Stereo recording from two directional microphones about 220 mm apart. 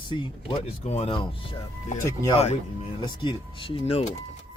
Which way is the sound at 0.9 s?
30° left (ahead or behind).